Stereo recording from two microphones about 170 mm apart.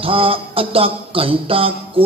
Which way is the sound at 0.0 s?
35° right (ahead or behind).